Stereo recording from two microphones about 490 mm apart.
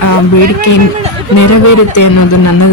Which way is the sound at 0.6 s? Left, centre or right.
Left.